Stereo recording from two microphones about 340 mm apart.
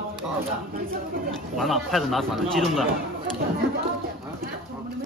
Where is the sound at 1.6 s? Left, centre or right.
Centre.